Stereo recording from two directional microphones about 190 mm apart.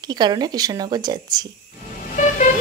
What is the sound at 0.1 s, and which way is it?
Speech, 20° right (ahead or behind).